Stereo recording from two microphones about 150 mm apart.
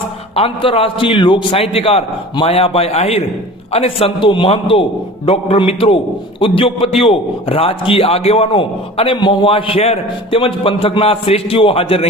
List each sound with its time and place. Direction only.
0.3 s a man's voice: 40° left (ahead or behind)